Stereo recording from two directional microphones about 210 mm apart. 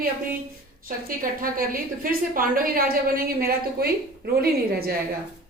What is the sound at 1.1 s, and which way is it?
A woman's voice, 40° right (ahead or behind).